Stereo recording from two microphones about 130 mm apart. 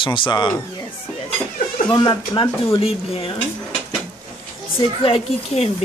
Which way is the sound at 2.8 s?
45° left (ahead or behind).